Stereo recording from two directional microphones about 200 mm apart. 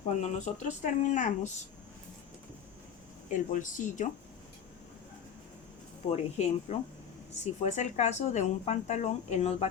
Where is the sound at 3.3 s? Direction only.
40° left (ahead or behind).